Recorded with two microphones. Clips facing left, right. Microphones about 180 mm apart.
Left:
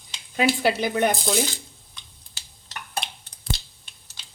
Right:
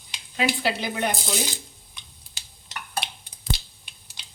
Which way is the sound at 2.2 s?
10° right (ahead or behind).